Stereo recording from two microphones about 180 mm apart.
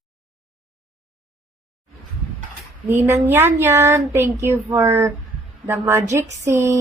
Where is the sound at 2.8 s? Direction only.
10° right (ahead or behind).